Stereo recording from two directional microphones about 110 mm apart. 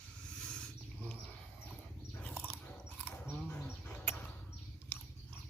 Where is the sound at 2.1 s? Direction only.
15° left (ahead or behind).